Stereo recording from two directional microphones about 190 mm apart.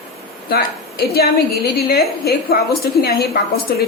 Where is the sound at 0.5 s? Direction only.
55° left (ahead or behind).